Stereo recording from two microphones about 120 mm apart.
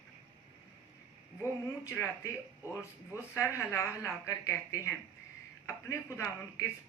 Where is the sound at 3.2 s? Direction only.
20° left (ahead or behind).